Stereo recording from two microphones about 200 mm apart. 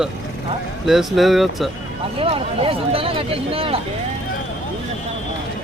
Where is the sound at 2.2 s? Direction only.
25° right (ahead or behind).